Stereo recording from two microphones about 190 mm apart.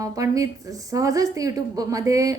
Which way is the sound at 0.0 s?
15° right (ahead or behind).